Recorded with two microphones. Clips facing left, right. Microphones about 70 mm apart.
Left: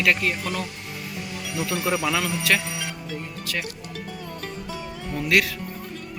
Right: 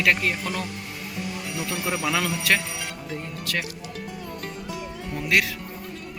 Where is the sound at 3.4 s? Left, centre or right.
Right.